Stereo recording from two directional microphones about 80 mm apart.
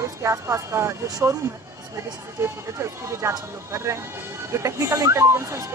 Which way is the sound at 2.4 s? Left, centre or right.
Right.